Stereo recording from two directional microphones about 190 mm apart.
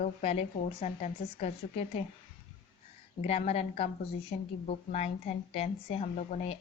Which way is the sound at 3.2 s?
35° left (ahead or behind).